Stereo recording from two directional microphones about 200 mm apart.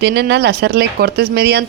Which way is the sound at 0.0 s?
60° right (ahead or behind).